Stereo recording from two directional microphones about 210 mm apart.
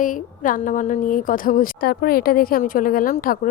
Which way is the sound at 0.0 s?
40° left (ahead or behind).